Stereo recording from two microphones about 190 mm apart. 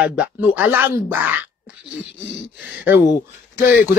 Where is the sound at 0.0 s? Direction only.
5° right (ahead or behind).